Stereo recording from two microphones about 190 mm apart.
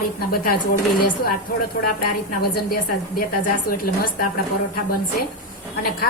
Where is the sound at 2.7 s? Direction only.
50° left (ahead or behind).